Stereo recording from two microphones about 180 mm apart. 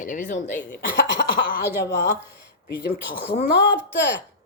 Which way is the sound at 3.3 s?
65° left (ahead or behind).